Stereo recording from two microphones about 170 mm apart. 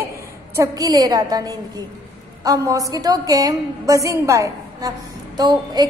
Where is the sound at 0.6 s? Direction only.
20° right (ahead or behind).